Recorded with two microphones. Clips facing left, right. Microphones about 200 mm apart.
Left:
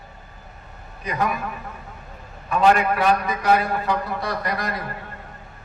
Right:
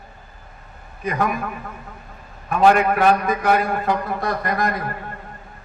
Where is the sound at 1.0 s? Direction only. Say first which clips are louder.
Right 2 dB; 50° right (ahead or behind).